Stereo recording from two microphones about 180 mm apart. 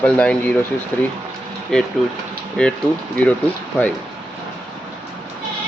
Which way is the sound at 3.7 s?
10° left (ahead or behind).